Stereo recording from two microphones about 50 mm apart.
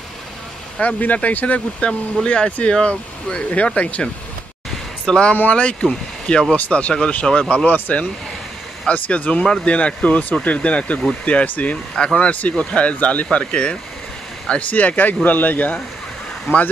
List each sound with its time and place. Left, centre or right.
0.7 s speech: left
1.9 s speech: centre
5.3 s speech: left
7.6 s speech: left
11.9 s speech: centre
12.3 s speech: left
14.7 s speech: left
16.5 s speech: left